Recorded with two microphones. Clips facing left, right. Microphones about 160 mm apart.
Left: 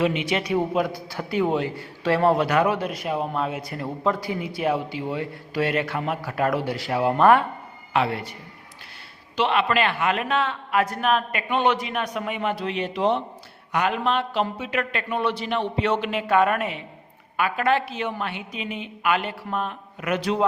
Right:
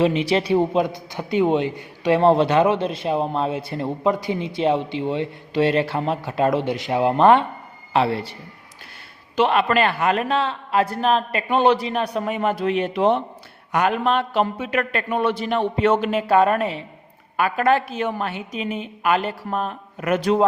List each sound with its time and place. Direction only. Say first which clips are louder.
0.0 s a man's voice: right 4 dB; 35° right (ahead or behind)
9.3 s a man's voice: right 4 dB; 45° right (ahead or behind)